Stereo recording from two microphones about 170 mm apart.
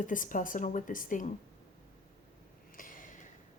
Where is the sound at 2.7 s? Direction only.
50° left (ahead or behind).